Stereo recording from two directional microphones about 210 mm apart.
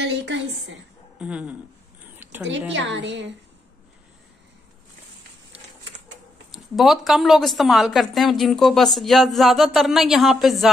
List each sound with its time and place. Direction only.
0.0 s a woman's voice: 55° right (ahead or behind)
1.2 s a sound: 5° right (ahead or behind)
2.7 s a woman's voice: 60° right (ahead or behind)
6.5 s a woman's voice: centre (ahead or behind)